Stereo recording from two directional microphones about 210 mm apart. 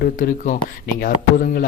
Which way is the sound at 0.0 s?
40° left (ahead or behind).